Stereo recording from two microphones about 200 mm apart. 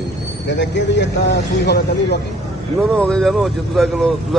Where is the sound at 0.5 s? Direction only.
60° left (ahead or behind).